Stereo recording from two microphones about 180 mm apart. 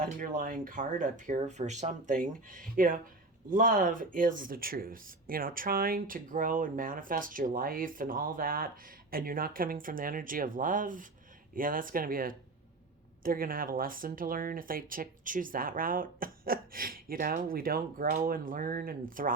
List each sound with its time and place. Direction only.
0.0 s speech: 50° right (ahead or behind)